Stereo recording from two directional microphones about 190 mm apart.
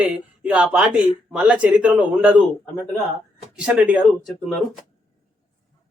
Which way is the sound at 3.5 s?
5° right (ahead or behind).